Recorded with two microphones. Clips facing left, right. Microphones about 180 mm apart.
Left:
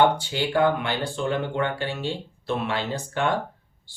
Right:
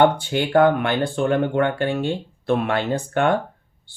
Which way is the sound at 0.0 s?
55° right (ahead or behind).